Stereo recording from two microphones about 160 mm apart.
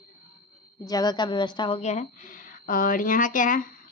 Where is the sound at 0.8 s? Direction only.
25° left (ahead or behind).